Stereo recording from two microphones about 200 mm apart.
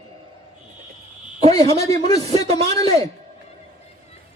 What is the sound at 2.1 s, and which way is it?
A man's voice, 20° left (ahead or behind).